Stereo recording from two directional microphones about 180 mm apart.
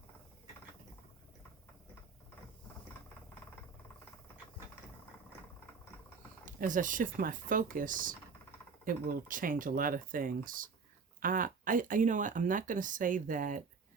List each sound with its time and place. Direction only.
6.4 s speech: 45° right (ahead or behind)